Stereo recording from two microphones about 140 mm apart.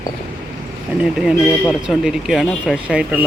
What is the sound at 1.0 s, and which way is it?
Speech, centre (ahead or behind).